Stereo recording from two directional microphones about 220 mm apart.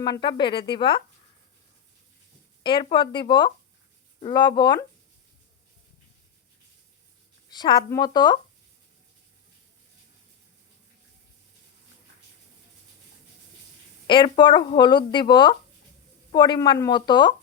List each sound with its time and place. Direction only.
0.0 s speech: 20° left (ahead or behind)
2.6 s speech: 20° left (ahead or behind)
7.5 s speech: 20° left (ahead or behind)
14.1 s speech: 20° left (ahead or behind)